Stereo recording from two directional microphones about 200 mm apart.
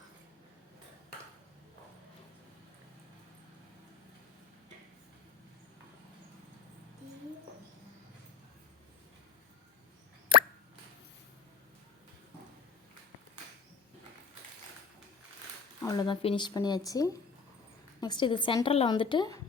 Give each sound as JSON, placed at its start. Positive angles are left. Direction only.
{"t": 10.3, "sound": "plop", "side_deg": -25}
{"t": 15.8, "sound": "speech", "side_deg": 20}